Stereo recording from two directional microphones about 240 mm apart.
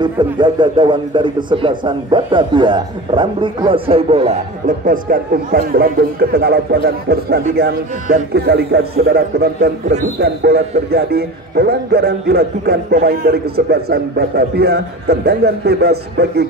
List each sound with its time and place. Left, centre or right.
0.0 s a man's voice: centre; by 16.4 s right